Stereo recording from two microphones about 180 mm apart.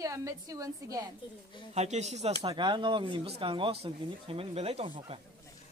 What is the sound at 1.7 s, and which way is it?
Speech, 40° right (ahead or behind).